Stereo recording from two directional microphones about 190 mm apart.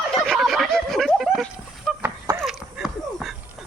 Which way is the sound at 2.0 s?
15° right (ahead or behind).